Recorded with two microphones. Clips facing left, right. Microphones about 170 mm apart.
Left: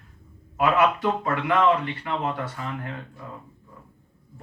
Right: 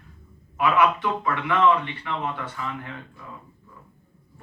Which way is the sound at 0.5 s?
40° left (ahead or behind).